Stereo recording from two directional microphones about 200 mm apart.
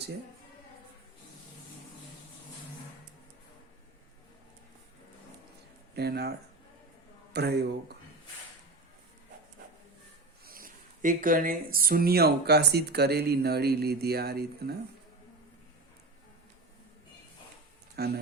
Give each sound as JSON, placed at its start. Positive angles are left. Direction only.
{"t": 5.9, "sound": "speech", "side_deg": -55}
{"t": 7.3, "sound": "speech", "side_deg": -55}
{"t": 10.4, "sound": "speech", "side_deg": -45}
{"t": 17.9, "sound": "speech", "side_deg": -50}